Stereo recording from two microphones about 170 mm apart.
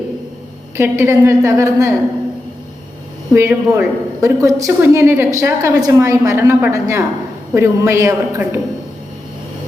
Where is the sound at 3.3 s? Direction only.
15° right (ahead or behind).